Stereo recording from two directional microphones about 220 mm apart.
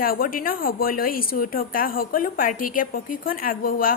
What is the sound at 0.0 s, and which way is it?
A woman's voice, 40° left (ahead or behind).